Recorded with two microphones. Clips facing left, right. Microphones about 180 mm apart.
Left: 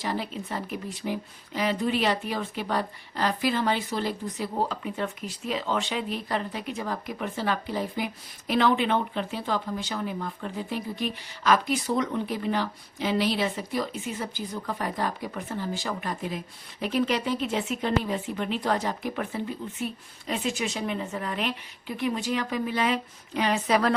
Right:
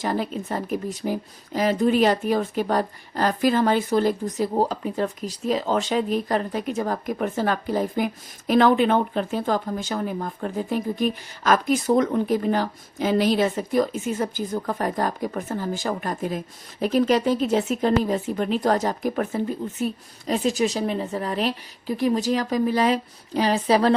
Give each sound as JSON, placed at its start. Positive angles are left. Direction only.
{"t": 0.0, "sound": "speech", "side_deg": -45}